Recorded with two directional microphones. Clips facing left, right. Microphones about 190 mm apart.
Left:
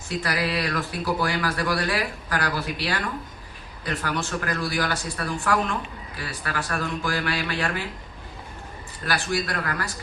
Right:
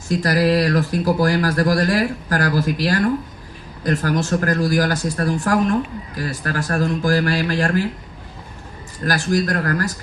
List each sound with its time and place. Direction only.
0.2 s speech: 40° right (ahead or behind)
9.0 s speech: 40° right (ahead or behind)